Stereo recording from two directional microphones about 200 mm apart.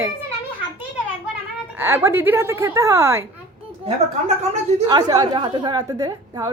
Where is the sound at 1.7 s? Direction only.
15° right (ahead or behind).